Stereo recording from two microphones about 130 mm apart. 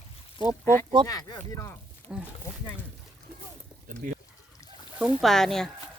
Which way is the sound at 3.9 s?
90° right.